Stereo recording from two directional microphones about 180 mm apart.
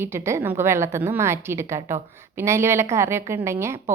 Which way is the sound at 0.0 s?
15° right (ahead or behind).